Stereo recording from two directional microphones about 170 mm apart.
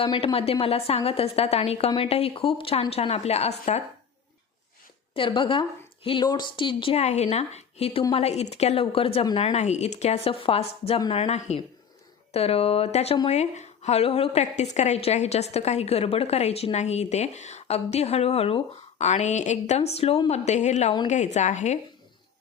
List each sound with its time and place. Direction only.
0.0 s a woman's voice: 30° left (ahead or behind)
5.1 s a woman's voice: 30° left (ahead or behind)